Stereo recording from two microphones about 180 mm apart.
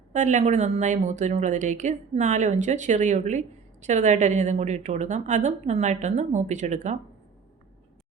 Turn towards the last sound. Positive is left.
turn(degrees=-40)  # may be behind; listen again after turning